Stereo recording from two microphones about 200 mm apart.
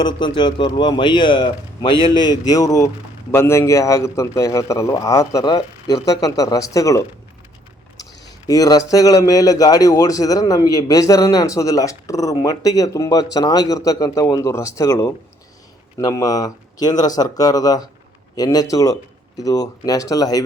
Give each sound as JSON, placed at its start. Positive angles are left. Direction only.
{"t": 0.0, "sound": "a man's voice", "side_deg": 25}
{"t": 8.4, "sound": "a man's voice", "side_deg": 20}